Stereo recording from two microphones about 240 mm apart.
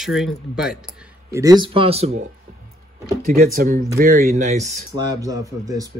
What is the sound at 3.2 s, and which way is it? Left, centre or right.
Speech, right.